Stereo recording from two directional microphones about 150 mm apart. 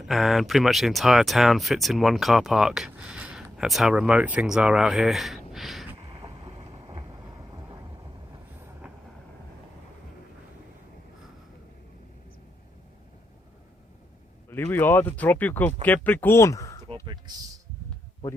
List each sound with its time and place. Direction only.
0.0 s speech: centre (ahead or behind)
6.1 s vehicle: 30° right (ahead or behind)
14.5 s speech: 15° left (ahead or behind)